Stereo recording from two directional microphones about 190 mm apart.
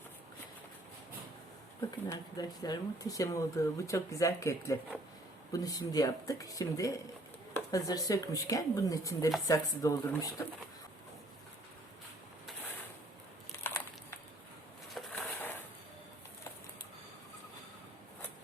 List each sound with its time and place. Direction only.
2.0 s speech: 20° left (ahead or behind)
13.7 s crushing: 15° left (ahead or behind)
14.9 s a sound: 5° left (ahead or behind)